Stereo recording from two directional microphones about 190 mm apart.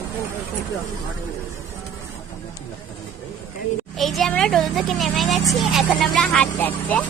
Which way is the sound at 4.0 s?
Centre (ahead or behind).